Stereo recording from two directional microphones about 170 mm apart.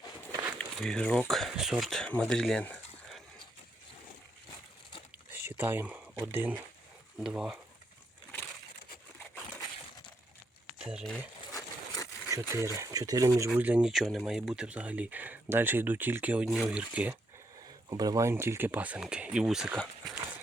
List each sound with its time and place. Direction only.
0.3 s a sound: 15° right (ahead or behind)
0.6 s speech: 5° left (ahead or behind)
5.3 s a sound: 10° right (ahead or behind)
6.2 s speech: 15° right (ahead or behind)
10.8 s speech: 5° right (ahead or behind)
12.3 s speech: 15° right (ahead or behind)
13.6 s speech: 5° right (ahead or behind)
17.8 s speech: 25° right (ahead or behind); by 19.8 s centre (ahead or behind)